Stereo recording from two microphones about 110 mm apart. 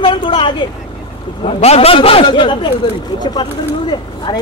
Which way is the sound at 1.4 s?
70° left (ahead or behind).